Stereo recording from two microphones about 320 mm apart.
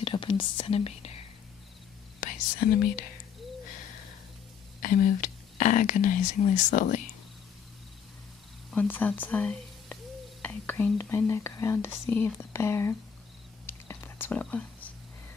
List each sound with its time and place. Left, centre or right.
0.0 s speech: centre
4.8 s speech: left
8.6 s speech: centre
13.7 s whispering: centre